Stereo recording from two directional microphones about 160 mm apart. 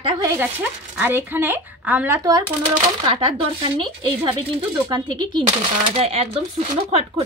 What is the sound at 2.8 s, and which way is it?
Speech, 35° right (ahead or behind).